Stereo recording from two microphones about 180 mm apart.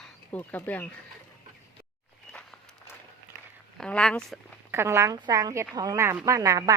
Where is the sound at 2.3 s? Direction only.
5° left (ahead or behind).